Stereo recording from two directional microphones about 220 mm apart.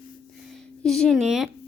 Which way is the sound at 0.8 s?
Centre (ahead or behind).